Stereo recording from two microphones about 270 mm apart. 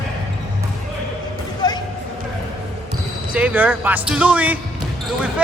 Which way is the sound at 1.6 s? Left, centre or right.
Centre.